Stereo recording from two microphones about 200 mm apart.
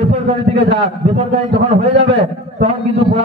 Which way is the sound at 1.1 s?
25° right (ahead or behind).